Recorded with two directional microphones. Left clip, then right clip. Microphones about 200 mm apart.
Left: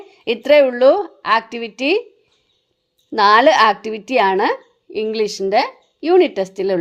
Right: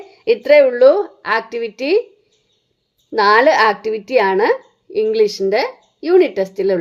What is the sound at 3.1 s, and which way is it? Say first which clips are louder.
Speech: even; 40° left (ahead or behind).